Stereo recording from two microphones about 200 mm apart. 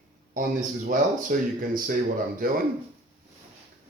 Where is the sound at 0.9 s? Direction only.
45° right (ahead or behind).